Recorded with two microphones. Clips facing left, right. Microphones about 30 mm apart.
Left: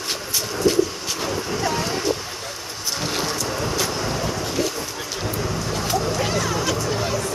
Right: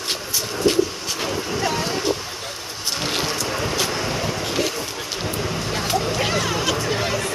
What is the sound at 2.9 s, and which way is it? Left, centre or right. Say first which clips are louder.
Vehicle: right 1 dB; right.